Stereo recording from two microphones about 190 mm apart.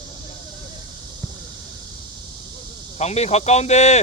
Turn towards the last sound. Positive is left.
turn(degrees=35)  # may be behind; listen again after turning